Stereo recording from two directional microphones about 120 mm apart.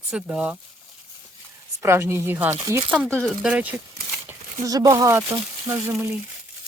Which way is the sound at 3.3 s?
5° right (ahead or behind).